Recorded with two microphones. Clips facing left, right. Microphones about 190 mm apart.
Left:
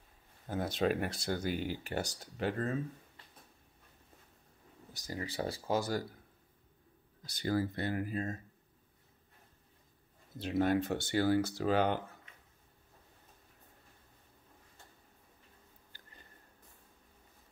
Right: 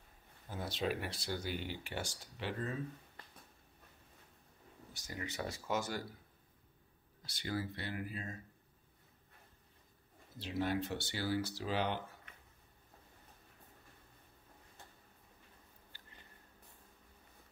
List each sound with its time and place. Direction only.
0.5 s speech: 50° left (ahead or behind)
4.9 s speech: 35° left (ahead or behind)
7.3 s speech: 45° left (ahead or behind)
10.4 s speech: 50° left (ahead or behind)